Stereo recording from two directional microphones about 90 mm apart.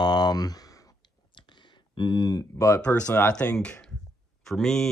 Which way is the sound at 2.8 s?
15° left (ahead or behind).